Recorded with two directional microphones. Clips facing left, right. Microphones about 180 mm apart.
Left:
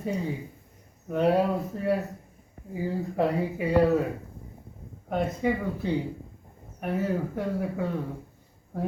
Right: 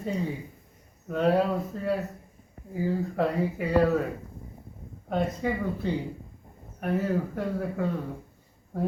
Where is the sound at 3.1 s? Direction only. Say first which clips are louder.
Left 1 dB; 15° left (ahead or behind).